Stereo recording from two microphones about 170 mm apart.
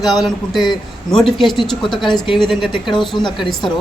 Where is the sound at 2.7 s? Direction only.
30° left (ahead or behind).